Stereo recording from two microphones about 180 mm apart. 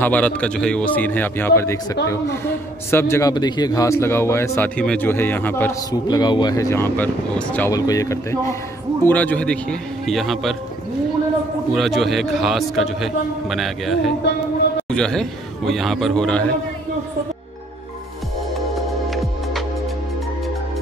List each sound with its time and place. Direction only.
0.0 s a man's voice: 10° left (ahead or behind)
7.7 s a man's voice: 20° left (ahead or behind); by 10.5 s centre (ahead or behind)
11.7 s a man's voice: centre (ahead or behind)